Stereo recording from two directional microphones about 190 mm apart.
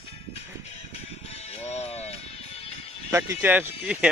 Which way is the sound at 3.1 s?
10° right (ahead or behind).